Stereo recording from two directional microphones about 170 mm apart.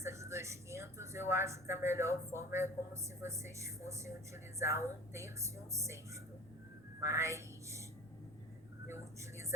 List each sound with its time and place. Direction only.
0.0 s a woman's voice: 15° right (ahead or behind)
7.0 s speech: 15° right (ahead or behind)